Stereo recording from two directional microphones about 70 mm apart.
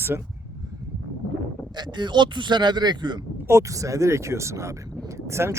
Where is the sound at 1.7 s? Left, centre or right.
Right.